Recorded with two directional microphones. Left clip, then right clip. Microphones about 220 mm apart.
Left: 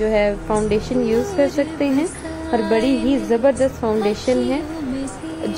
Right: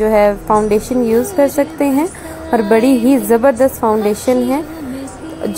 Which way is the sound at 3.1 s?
20° right (ahead or behind).